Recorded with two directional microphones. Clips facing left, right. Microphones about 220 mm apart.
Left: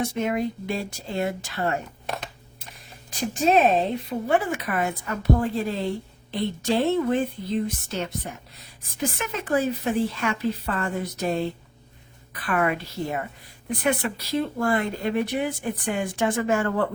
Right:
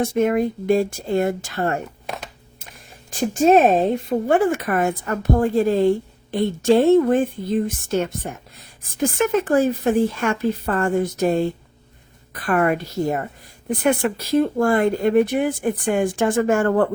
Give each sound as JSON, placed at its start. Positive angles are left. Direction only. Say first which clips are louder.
{"t": 0.0, "sound": "speech", "louder": "right 6 dB", "side_deg": -50}
{"t": 3.1, "sound": "speech", "louder": "right 7 dB", "side_deg": -45}